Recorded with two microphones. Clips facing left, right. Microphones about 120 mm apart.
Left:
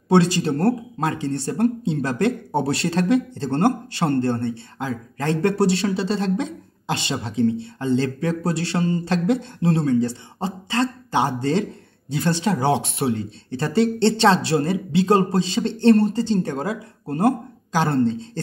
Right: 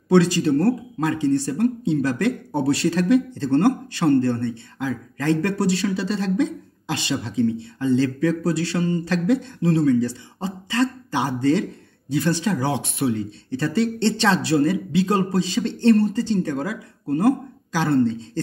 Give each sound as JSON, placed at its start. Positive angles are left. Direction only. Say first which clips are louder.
{"t": 0.1, "sound": "speech", "louder": "right 1 dB", "side_deg": 25}